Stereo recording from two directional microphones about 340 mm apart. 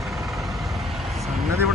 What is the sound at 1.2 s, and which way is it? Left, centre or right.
Vehicle, centre.